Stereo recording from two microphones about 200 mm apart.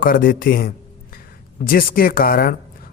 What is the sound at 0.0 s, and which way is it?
A man's voice, 45° left (ahead or behind).